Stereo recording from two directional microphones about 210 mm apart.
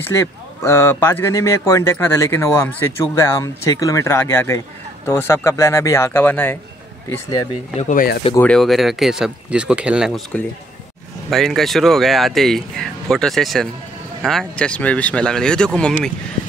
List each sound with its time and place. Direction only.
0.1 s speech: 15° left (ahead or behind)
7.7 s speech: 40° left (ahead or behind)
8.4 s speech: 5° left (ahead or behind)